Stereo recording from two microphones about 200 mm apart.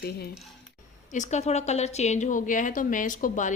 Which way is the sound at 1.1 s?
35° left (ahead or behind).